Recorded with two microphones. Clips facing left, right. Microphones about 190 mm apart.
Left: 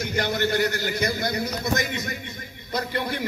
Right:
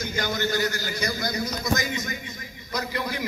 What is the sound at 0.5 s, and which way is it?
Speech, 60° left (ahead or behind).